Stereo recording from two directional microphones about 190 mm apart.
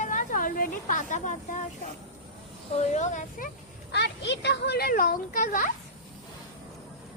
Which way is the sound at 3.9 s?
65° left (ahead or behind).